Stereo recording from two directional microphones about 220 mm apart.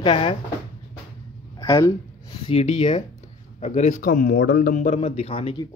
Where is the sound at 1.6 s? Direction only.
15° left (ahead or behind).